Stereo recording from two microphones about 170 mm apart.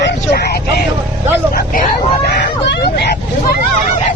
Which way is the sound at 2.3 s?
70° left (ahead or behind).